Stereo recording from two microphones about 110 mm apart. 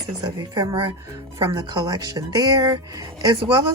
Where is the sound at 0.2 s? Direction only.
40° right (ahead or behind).